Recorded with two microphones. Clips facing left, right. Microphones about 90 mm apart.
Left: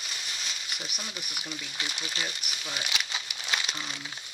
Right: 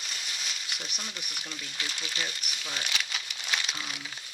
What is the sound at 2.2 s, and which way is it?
Speech, 5° left (ahead or behind).